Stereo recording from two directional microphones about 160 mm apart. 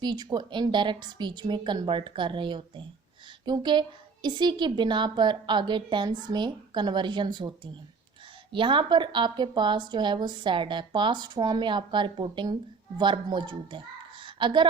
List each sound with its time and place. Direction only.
0.0 s a woman's voice: 25° right (ahead or behind)